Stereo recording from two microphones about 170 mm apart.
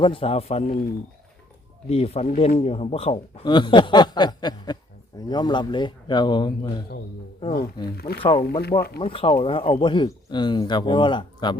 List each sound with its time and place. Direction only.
0.0 s a man's voice: 30° left (ahead or behind)
1.9 s a man's voice: 35° left (ahead or behind)
7.9 s speech: 65° left (ahead or behind)
8.2 s speech: 30° left (ahead or behind)